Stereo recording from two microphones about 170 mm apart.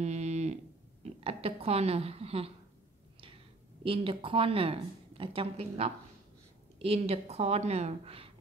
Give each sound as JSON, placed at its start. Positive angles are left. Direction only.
{"t": 0.0, "sound": "moo", "side_deg": -40}
{"t": 1.0, "sound": "speech", "side_deg": -35}
{"t": 3.8, "sound": "a woman's voice", "side_deg": -30}